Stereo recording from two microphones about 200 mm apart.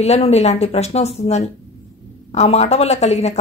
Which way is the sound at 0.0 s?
30° left (ahead or behind).